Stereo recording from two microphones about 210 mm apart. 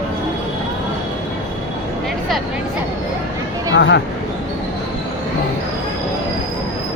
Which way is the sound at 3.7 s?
55° left (ahead or behind).